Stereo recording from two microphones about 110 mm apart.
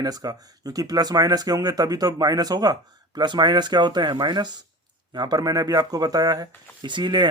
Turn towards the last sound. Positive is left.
turn(degrees=-45)  # may be behind; listen again after turning